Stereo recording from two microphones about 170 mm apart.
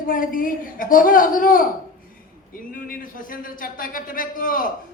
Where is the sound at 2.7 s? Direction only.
55° left (ahead or behind).